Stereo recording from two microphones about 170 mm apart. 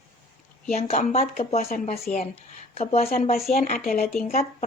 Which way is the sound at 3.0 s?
55° left (ahead or behind).